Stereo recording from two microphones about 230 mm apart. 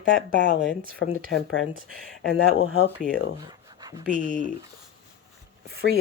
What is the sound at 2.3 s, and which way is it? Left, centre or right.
Speech, left.